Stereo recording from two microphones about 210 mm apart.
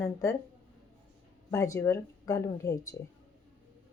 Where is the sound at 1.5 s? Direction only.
15° left (ahead or behind).